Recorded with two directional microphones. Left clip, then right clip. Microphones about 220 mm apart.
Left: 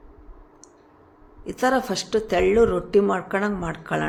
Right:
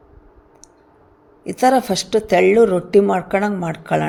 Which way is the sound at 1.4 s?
20° right (ahead or behind).